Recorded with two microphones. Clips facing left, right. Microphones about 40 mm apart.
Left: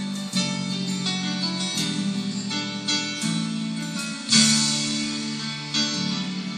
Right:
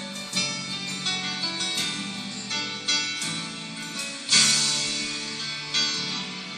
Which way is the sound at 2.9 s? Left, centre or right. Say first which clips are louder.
Left 1 dB; right.